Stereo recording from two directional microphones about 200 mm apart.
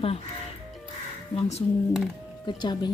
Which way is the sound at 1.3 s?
30° left (ahead or behind).